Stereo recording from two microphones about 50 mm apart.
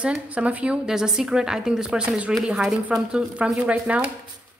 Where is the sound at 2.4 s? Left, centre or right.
Centre; by 4.1 s right.